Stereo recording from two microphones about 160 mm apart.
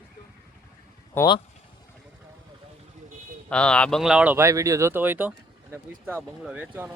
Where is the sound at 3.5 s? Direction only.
5° left (ahead or behind); by 6.9 s 10° right (ahead or behind).